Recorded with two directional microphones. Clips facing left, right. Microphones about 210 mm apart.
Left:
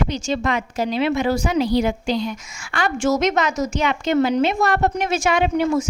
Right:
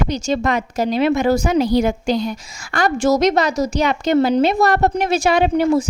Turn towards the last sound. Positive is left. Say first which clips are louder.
# right 3 dB
turn(degrees=-35)  # may be behind; listen again after turning